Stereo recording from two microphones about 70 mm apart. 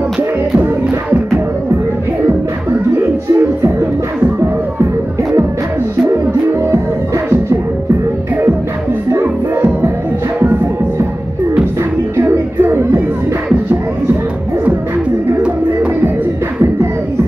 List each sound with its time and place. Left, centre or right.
2.9 s music: right
9.1 s music: right
12.2 s music: right